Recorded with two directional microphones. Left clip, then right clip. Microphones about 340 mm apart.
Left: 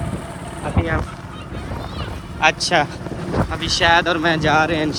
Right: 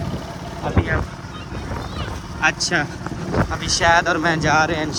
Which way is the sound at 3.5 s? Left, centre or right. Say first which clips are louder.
Left 1 dB; centre.